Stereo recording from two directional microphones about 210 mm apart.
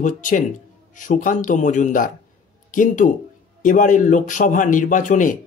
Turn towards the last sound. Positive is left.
turn(degrees=40)  # may be behind; listen again after turning